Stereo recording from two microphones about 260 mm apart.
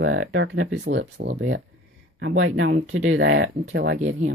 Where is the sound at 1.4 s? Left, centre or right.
Right.